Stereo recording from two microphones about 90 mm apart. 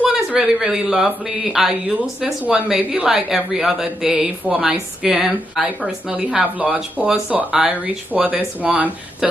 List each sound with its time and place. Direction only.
0.0 s a woman's voice: 10° right (ahead or behind)
2.4 s a woman's voice: 15° right (ahead or behind)
9.2 s speech: 5° right (ahead or behind)